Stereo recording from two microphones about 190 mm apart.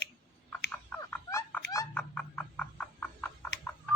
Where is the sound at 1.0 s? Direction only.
15° left (ahead or behind).